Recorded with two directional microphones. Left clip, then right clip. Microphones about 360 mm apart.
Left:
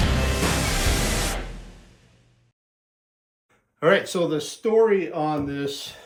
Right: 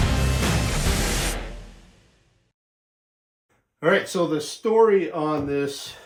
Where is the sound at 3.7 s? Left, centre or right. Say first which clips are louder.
Left 1 dB; centre.